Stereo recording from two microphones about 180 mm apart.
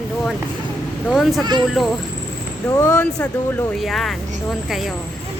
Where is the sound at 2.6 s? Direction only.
20° left (ahead or behind).